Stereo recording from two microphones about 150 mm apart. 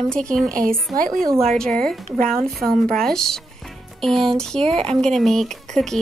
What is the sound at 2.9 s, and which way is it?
Speech, 5° left (ahead or behind).